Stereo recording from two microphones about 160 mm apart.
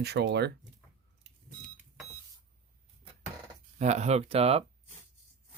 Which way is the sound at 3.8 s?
45° right (ahead or behind).